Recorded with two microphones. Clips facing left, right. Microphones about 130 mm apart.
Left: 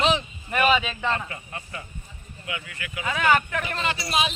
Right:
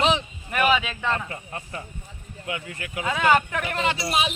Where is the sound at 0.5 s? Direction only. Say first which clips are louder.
Even; 5° right (ahead or behind).